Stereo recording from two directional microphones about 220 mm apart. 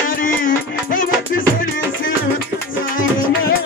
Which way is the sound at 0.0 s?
40° left (ahead or behind).